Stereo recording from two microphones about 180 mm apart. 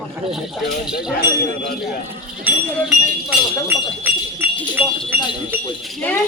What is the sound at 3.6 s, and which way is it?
Speech, 10° right (ahead or behind).